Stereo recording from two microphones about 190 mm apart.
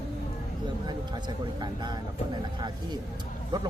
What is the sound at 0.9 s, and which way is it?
Speech, 25° right (ahead or behind).